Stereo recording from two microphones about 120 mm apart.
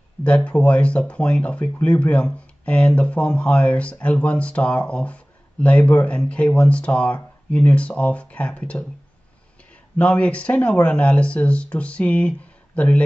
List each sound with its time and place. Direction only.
0.2 s speech: 10° left (ahead or behind)
9.9 s speech: 10° left (ahead or behind)